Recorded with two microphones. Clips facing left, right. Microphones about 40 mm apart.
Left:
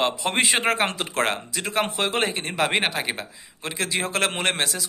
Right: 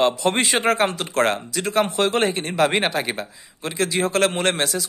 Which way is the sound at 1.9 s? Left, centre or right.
Centre.